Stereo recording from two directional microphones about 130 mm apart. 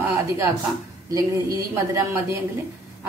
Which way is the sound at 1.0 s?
25° right (ahead or behind).